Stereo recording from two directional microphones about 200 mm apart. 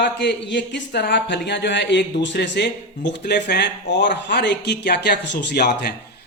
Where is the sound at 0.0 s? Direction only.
60° left (ahead or behind).